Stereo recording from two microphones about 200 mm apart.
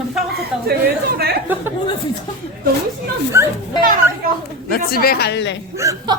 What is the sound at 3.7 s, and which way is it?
Speech, 45° right (ahead or behind).